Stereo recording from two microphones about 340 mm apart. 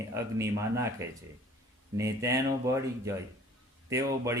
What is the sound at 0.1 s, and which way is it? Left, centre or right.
Speech, centre.